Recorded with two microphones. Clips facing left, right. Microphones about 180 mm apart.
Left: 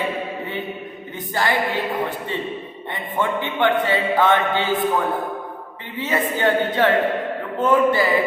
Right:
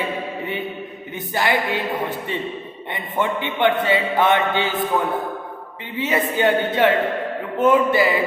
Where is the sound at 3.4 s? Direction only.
20° right (ahead or behind).